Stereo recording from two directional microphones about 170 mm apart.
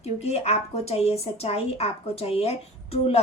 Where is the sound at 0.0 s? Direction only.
40° left (ahead or behind).